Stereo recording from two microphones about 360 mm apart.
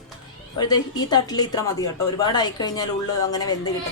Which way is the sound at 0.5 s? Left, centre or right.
Centre.